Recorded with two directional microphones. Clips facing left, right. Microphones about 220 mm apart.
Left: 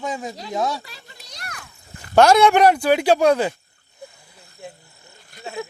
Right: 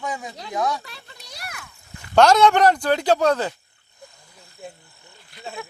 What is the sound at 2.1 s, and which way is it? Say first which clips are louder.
Speech: left 2 dB; 10° left (ahead or behind).